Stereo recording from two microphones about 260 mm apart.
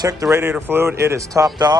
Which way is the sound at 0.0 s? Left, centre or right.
Centre.